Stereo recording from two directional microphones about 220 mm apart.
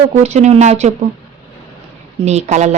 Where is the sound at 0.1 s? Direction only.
30° right (ahead or behind).